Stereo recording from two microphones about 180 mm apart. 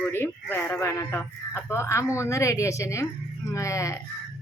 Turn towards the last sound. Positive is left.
turn(degrees=15)  # may be behind; listen again after turning